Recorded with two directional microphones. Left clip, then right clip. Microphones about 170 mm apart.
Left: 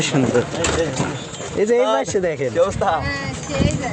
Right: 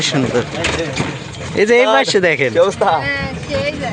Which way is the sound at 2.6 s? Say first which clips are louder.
Right 3 dB; 45° right (ahead or behind).